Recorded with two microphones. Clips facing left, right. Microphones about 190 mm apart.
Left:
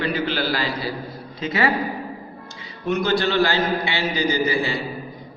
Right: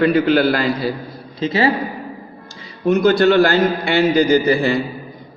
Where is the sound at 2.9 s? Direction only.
50° right (ahead or behind).